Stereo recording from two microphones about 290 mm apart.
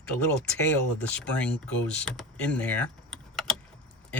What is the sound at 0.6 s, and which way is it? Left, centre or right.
Speech, centre.